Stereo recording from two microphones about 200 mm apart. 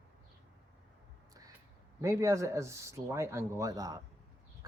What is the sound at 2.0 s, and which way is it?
Speech, 15° right (ahead or behind).